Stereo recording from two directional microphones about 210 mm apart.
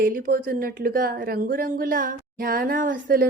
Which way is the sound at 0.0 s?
40° right (ahead or behind).